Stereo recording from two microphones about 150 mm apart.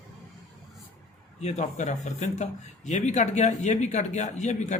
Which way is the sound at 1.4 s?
50° left (ahead or behind).